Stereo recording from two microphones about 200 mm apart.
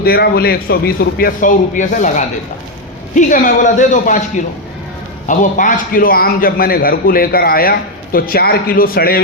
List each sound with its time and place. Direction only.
0.0 s a man's voice: 50° left (ahead or behind)
5.3 s a man's voice: 40° left (ahead or behind)